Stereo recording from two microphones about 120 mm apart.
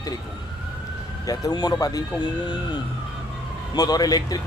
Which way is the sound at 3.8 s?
30° left (ahead or behind).